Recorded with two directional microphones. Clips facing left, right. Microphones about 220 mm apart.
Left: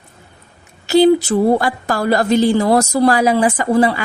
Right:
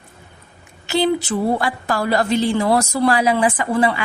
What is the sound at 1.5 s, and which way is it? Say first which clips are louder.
Speech: left 3 dB; 40° left (ahead or behind).